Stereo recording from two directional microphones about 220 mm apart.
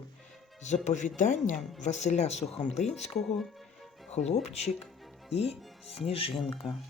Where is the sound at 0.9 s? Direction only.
35° left (ahead or behind).